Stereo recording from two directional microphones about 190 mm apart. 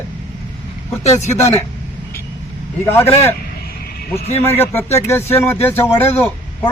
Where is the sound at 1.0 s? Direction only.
35° left (ahead or behind).